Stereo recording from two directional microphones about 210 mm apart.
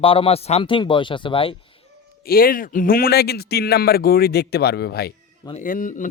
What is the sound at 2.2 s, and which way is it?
Speech, 45° left (ahead or behind).